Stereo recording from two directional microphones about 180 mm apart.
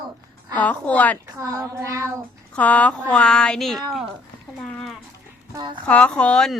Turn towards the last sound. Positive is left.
turn(degrees=5)  # may be behind; listen again after turning